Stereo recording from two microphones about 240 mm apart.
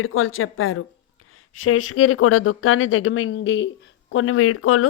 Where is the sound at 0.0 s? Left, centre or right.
Left.